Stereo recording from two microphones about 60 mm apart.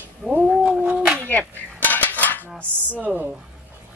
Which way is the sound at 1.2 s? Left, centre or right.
Left.